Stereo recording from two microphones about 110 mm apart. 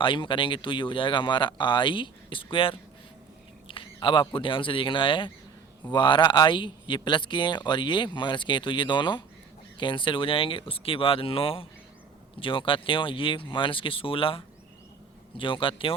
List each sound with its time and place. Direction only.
0.0 s speech: 50° left (ahead or behind)